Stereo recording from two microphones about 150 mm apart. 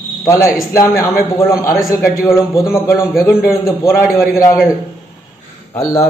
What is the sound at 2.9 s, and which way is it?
Speech, centre (ahead or behind).